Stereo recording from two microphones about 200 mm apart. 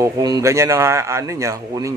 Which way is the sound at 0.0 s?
15° right (ahead or behind).